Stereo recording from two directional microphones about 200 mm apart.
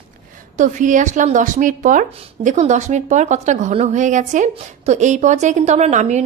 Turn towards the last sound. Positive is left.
turn(degrees=-35)  # may be behind; listen again after turning